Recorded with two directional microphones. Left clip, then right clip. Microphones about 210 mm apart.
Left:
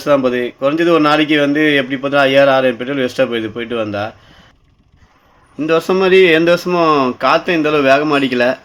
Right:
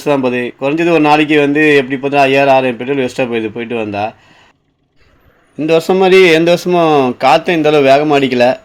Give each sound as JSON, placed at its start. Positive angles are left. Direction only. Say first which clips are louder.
{"t": 0.0, "sound": "speech", "louder": "even", "side_deg": -15}
{"t": 5.5, "sound": "speech", "louder": "right 3 dB", "side_deg": -15}